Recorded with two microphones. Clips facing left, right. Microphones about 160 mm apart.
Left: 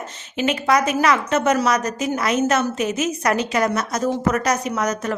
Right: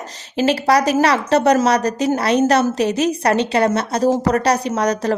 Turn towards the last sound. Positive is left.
turn(degrees=-35)  # may be behind; listen again after turning